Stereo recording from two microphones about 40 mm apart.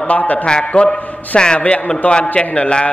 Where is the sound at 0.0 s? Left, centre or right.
Left.